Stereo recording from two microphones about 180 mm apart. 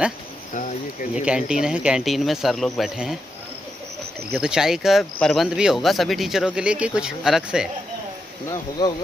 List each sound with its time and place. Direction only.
0.5 s speech: 40° left (ahead or behind)
1.1 s speech: 5° right (ahead or behind)
4.3 s speech: 5° right (ahead or behind)
8.8 s speech: 20° left (ahead or behind)